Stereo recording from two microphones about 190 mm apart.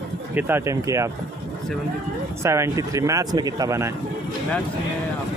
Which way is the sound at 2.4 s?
15° right (ahead or behind).